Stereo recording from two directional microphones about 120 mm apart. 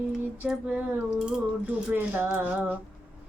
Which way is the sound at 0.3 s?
10° right (ahead or behind).